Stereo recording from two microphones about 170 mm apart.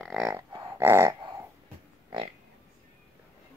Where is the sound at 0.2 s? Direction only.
20° right (ahead or behind).